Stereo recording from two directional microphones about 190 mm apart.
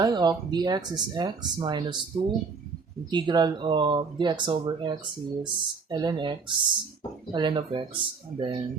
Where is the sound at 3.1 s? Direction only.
20° right (ahead or behind).